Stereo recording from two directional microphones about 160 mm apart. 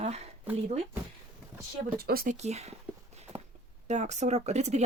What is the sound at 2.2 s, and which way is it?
Speech, 45° right (ahead or behind).